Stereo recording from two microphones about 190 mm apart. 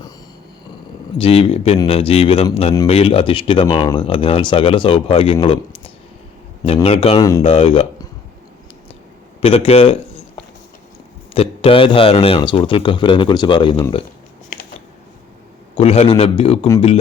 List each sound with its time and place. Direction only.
1.2 s speech: 30° left (ahead or behind)
9.4 s a sound: 30° left (ahead or behind)
11.3 s speech: 30° left (ahead or behind)
15.7 s speech: 30° left (ahead or behind)